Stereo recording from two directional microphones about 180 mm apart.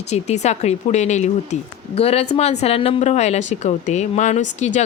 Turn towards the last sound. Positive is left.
turn(degrees=40)  # may be behind; listen again after turning